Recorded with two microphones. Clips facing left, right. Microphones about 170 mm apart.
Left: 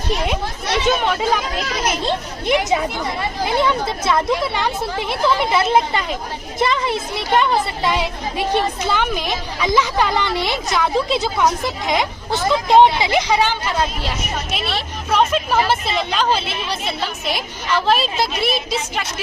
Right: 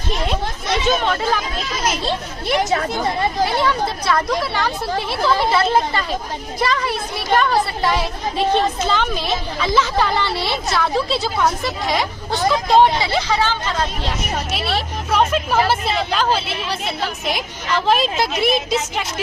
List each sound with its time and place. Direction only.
1.0 s a woman's voice: 15° left (ahead or behind)
1.5 s speech: 70° left (ahead or behind)
2.5 s a woman's voice: 20° left (ahead or behind)
14.5 s a woman's voice: 10° right (ahead or behind)
17.8 s a woman's voice: 15° right (ahead or behind)